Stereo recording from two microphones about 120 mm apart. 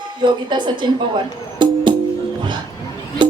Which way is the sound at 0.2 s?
40° right (ahead or behind).